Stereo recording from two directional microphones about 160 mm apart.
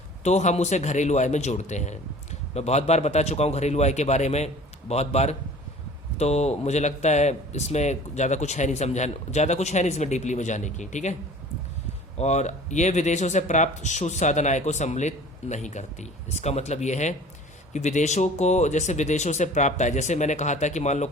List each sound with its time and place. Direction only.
0.3 s speech: 45° left (ahead or behind)
12.1 s speech: 45° left (ahead or behind)